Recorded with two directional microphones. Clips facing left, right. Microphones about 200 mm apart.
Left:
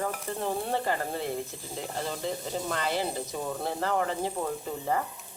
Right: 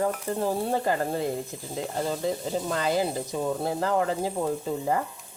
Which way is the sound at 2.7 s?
40° right (ahead or behind).